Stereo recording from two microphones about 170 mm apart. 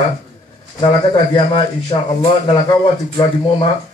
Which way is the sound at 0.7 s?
30° left (ahead or behind).